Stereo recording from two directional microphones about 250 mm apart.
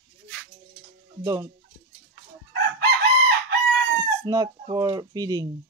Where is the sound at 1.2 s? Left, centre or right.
Centre.